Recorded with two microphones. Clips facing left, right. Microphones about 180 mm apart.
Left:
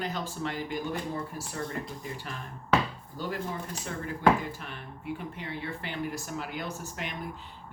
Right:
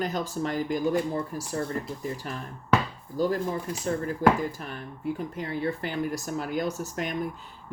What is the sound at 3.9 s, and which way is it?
Speech, 40° right (ahead or behind).